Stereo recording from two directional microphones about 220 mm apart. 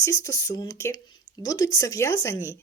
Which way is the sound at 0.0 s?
15° left (ahead or behind).